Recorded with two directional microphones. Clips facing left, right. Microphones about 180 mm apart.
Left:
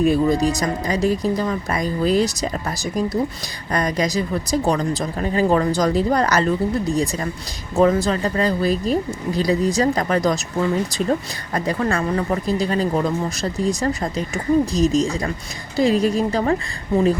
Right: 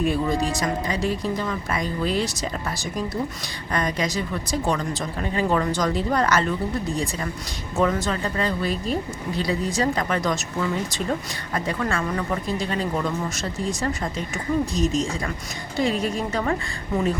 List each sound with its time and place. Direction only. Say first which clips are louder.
0.0 s speech: left 6 dB; 40° left (ahead or behind)